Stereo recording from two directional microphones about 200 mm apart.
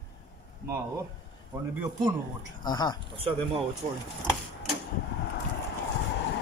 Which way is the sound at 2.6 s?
20° left (ahead or behind).